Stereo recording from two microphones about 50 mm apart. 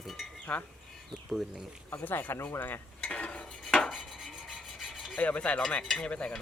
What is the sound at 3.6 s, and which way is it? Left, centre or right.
Rub, centre.